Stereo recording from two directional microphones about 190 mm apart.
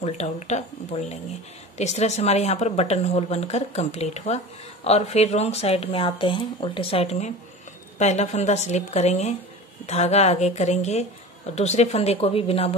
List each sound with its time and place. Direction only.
0.0 s speech: 35° left (ahead or behind)